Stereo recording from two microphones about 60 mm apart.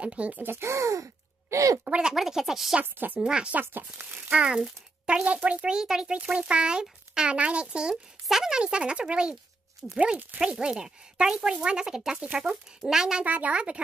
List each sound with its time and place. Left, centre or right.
0.0 s speech: centre
0.7 s gasp: right
1.9 s speech: centre
2.8 s speech: right
3.2 s speech: centre
3.6 s speech: right
4.3 s speech: centre
9.8 s speech: centre
10.4 s speech: centre
13.2 s speech: right